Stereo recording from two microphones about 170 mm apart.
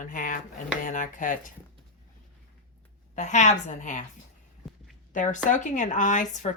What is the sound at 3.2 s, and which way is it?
Speech, 45° left (ahead or behind).